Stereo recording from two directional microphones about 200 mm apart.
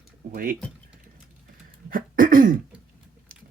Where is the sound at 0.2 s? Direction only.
45° right (ahead or behind).